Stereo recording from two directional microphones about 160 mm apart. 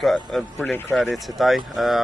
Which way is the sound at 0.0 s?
Centre (ahead or behind).